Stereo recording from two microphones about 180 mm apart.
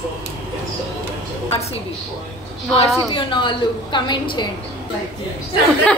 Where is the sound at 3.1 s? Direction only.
30° left (ahead or behind).